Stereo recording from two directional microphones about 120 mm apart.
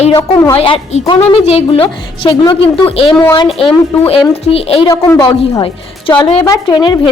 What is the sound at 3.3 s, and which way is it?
A woman's voice, 50° left (ahead or behind).